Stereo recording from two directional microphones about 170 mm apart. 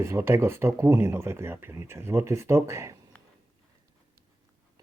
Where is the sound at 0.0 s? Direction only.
15° right (ahead or behind).